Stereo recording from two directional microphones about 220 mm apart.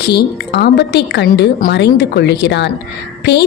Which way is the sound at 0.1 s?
45° left (ahead or behind).